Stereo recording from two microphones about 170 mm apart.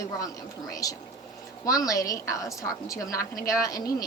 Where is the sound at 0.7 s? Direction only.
20° left (ahead or behind).